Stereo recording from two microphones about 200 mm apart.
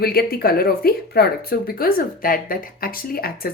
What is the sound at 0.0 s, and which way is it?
Speech, 50° left (ahead or behind).